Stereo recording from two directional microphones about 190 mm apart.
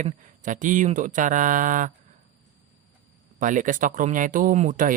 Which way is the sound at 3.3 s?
40° right (ahead or behind).